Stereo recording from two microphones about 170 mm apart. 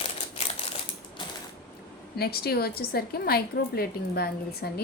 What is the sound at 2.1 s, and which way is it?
A woman's voice, 65° left (ahead or behind).